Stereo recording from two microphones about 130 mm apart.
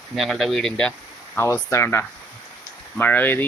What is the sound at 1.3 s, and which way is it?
Speech, 20° left (ahead or behind).